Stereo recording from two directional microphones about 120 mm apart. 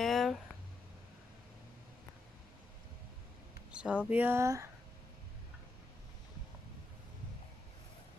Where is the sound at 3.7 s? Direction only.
10° right (ahead or behind); by 4.6 s 25° right (ahead or behind).